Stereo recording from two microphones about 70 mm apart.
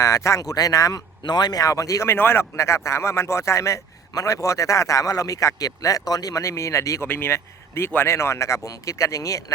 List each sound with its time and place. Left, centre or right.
0.0 s speech: left
1.2 s speech: left
2.0 s speech: left
7.0 s speech: left